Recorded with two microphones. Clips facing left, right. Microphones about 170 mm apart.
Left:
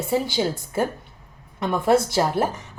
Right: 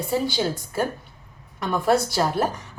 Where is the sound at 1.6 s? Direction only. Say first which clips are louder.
Left 2 dB; 25° left (ahead or behind).